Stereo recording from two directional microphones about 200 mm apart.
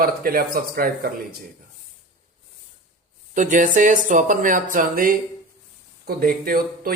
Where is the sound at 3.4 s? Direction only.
40° right (ahead or behind).